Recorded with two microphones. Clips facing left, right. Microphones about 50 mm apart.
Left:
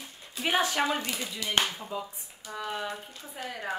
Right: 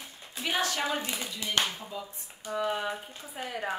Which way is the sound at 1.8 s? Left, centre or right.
Centre.